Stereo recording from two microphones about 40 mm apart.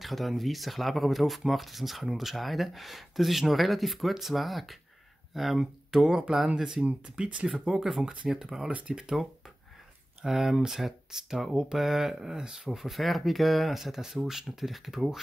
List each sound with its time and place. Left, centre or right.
0.0 s speech: centre; by 7.3 s right
7.7 s speech: centre
10.2 s speech: centre